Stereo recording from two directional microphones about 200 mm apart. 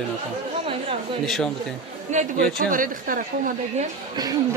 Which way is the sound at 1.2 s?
Centre (ahead or behind).